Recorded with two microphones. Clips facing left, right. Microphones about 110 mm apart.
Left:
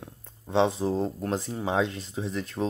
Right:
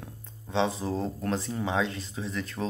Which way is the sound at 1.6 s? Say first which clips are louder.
Left 4 dB; 40° left (ahead or behind).